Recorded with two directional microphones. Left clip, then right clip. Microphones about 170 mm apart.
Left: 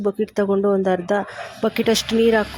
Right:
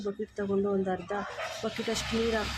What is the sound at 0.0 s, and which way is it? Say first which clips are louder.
A woman's voice: left 14 dB; 50° left (ahead or behind).